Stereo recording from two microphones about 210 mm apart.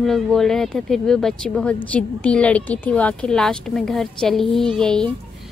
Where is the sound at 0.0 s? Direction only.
Centre (ahead or behind).